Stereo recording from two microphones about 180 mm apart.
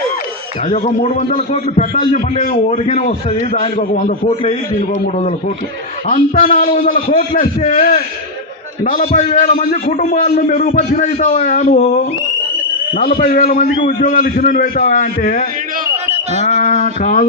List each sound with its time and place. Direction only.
0.7 s a man's voice: 35° left (ahead or behind)
6.1 s a man's voice: 45° left (ahead or behind)
13.0 s a man's voice: 50° left (ahead or behind)
16.4 s a sound: 45° left (ahead or behind)